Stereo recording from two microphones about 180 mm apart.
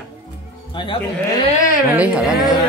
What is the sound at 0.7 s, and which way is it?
Speech, 25° left (ahead or behind).